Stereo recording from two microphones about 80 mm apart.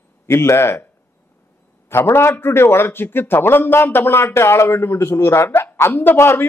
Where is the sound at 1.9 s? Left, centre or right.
Left.